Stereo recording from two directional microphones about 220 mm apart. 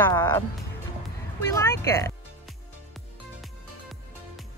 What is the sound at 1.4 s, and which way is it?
Speech, 10° left (ahead or behind).